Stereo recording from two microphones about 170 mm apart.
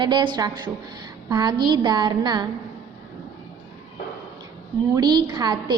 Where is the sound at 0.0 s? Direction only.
25° right (ahead or behind).